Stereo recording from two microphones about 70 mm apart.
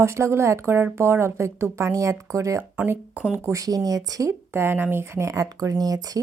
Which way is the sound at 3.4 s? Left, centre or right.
Right.